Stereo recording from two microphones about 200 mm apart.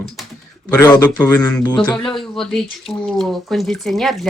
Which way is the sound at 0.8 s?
15° left (ahead or behind).